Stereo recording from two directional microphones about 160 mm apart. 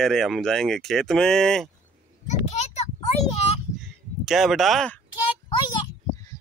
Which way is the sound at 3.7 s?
Centre (ahead or behind).